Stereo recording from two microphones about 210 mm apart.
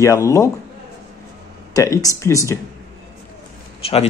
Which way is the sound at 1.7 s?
15° left (ahead or behind).